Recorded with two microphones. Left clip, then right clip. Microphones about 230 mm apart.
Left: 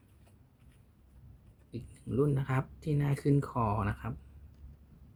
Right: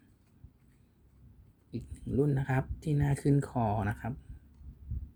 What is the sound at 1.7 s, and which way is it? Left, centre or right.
Speech, centre.